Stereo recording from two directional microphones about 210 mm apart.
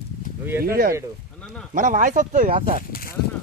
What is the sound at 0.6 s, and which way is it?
Speech, 45° right (ahead or behind).